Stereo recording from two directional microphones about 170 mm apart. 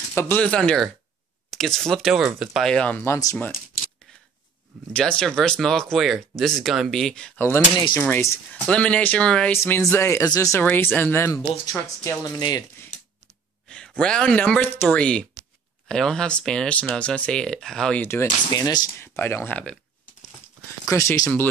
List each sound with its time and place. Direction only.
0.1 s speech: 15° left (ahead or behind)
4.9 s speech: 5° left (ahead or behind)
9.6 s speech: 15° left (ahead or behind)
13.7 s speech: 5° left (ahead or behind)
18.5 s speech: 20° left (ahead or behind)
20.8 s speech: 15° left (ahead or behind)